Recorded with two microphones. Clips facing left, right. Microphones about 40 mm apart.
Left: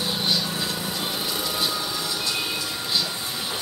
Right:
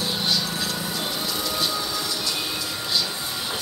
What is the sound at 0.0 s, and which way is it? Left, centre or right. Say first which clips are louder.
Vehicle: even; centre.